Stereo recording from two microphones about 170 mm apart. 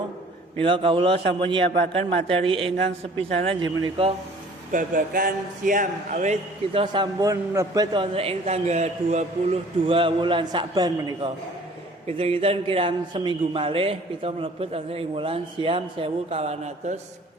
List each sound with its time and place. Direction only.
0.5 s a man's voice: 30° right (ahead or behind)
4.7 s speech: 50° right (ahead or behind)
6.7 s a man's voice: 30° right (ahead or behind)
8.1 s a man's voice: 35° right (ahead or behind)